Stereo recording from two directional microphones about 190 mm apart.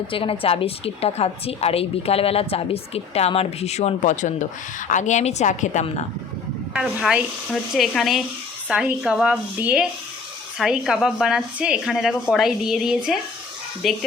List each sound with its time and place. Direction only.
0.1 s a woman's voice: 30° left (ahead or behind)
6.7 s speech: 5° right (ahead or behind)